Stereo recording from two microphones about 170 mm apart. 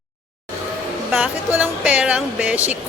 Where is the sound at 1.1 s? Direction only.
5° right (ahead or behind).